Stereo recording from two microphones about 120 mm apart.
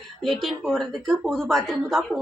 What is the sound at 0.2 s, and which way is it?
A woman's voice, centre (ahead or behind).